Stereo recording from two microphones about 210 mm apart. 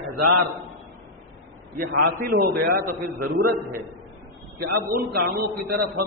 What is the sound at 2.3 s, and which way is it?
A man's voice, 45° right (ahead or behind).